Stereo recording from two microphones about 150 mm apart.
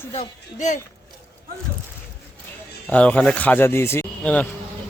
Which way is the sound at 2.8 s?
10° left (ahead or behind).